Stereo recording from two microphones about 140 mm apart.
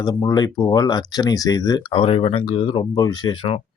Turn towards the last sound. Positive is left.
turn(degrees=35)  # may be behind; listen again after turning